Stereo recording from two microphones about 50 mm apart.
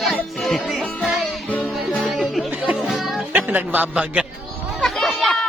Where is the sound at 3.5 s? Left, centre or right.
Right.